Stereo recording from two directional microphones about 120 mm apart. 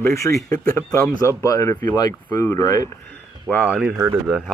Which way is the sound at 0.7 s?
25° left (ahead or behind).